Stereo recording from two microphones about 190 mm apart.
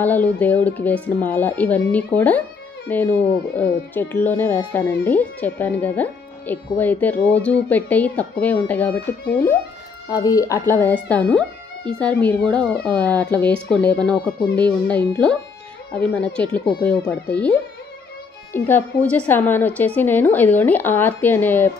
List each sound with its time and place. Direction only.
0.0 s speech: 10° left (ahead or behind)